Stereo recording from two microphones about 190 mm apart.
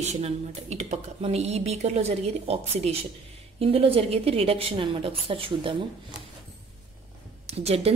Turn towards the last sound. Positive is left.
turn(degrees=-35)  # may be behind; listen again after turning